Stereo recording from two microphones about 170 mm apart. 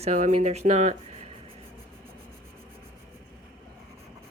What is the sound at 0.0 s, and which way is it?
Speech, 40° right (ahead or behind).